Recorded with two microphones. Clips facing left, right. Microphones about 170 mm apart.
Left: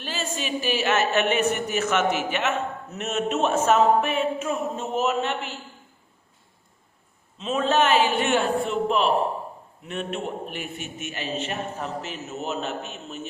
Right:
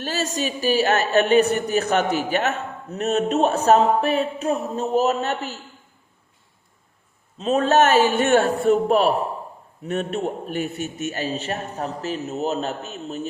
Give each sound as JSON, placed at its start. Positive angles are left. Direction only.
{"t": 0.0, "sound": "speech", "side_deg": -40}
{"t": 7.3, "sound": "speech", "side_deg": -40}